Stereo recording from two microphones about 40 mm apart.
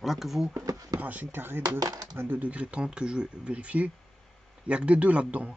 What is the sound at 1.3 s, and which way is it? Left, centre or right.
Speech, right.